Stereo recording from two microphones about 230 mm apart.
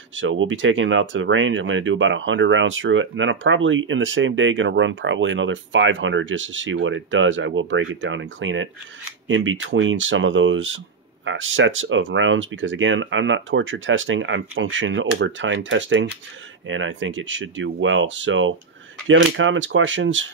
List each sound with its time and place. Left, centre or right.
0.1 s speech: right